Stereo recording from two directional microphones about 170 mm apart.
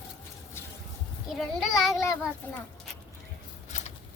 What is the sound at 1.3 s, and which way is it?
Speech, centre (ahead or behind).